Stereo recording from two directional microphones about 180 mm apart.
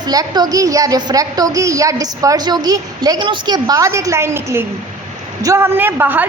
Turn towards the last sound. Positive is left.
turn(degrees=-10)  # may be behind; listen again after turning